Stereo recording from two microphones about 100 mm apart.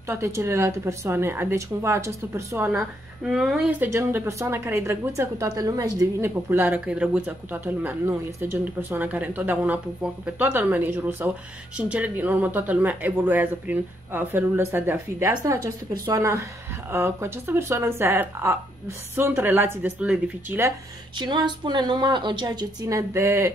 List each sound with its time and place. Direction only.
0.1 s speech: 30° right (ahead or behind)
2.7 s a woman's voice: 5° right (ahead or behind)
3.9 s a woman's voice: 25° right (ahead or behind)
21.2 s a woman's voice: 50° right (ahead or behind); by 23.5 s 30° right (ahead or behind)